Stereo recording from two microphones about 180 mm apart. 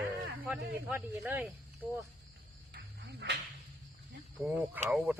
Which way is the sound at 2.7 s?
70° right (ahead or behind).